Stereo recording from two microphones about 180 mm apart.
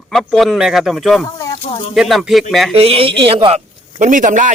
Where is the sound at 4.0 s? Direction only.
45° right (ahead or behind).